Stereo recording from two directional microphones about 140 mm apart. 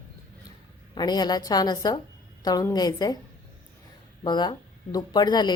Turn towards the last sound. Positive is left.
turn(degrees=30)  # may be behind; listen again after turning